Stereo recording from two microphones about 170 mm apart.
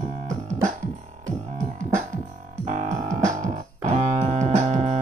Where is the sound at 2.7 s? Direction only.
45° right (ahead or behind).